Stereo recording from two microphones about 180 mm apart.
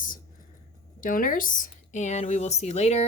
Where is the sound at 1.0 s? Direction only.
50° left (ahead or behind).